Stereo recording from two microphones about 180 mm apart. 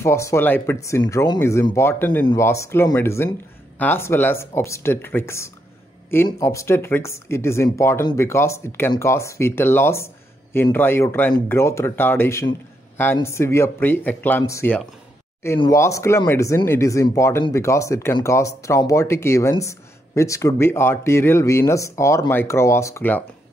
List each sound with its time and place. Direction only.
0.0 s speech: 15° left (ahead or behind)